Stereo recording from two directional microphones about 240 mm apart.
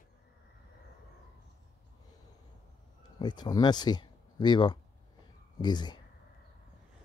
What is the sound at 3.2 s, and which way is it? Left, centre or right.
Speech, centre.